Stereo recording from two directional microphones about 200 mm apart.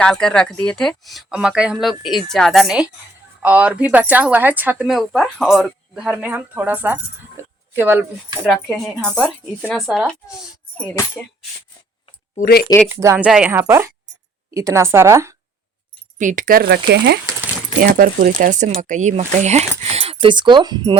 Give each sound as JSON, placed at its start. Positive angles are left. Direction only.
{"t": 0.0, "sound": "a woman's voice", "side_deg": 5}
{"t": 7.4, "sound": "a sound", "side_deg": -15}
{"t": 7.8, "sound": "a woman's voice", "side_deg": -10}
{"t": 8.4, "sound": "speech", "side_deg": 0}
{"t": 12.4, "sound": "speech", "side_deg": 50}
{"t": 12.9, "sound": "a woman's voice", "side_deg": -15}
{"t": 16.1, "sound": "speech", "side_deg": -40}